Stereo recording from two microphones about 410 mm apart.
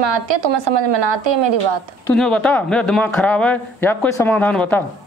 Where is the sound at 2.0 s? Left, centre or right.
Centre.